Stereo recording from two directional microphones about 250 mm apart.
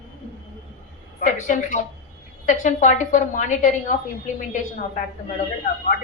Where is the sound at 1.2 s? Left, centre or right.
Left.